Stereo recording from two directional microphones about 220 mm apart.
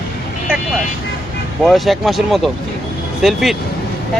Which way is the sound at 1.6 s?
Centre (ahead or behind).